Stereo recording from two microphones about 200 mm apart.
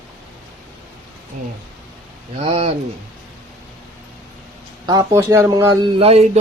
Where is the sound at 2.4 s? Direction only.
30° right (ahead or behind).